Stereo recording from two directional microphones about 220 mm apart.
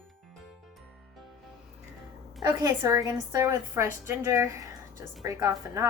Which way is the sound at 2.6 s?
15° right (ahead or behind).